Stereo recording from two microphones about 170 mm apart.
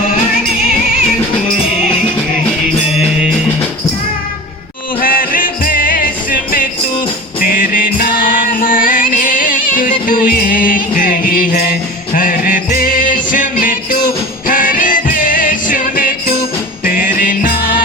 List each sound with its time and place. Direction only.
4.9 s music: 55° left (ahead or behind)